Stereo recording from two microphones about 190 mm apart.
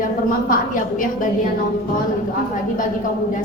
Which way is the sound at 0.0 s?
45° left (ahead or behind).